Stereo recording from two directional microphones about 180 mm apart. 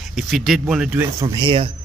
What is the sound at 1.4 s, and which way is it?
Speech, 30° right (ahead or behind).